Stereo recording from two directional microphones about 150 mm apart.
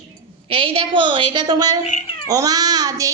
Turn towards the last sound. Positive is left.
turn(degrees=-25)  # may be behind; listen again after turning